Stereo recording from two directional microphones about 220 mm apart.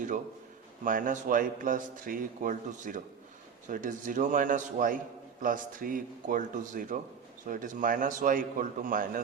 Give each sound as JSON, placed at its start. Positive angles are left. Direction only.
{"t": 0.9, "sound": "a man's voice", "side_deg": -35}